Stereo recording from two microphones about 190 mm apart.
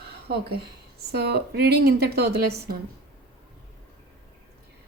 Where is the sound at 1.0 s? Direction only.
55° right (ahead or behind).